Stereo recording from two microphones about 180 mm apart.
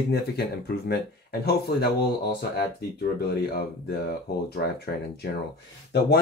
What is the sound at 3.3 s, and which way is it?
Speech, 60° left (ahead or behind).